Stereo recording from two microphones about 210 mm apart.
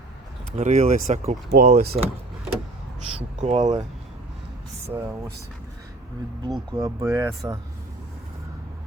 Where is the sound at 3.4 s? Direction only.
35° right (ahead or behind).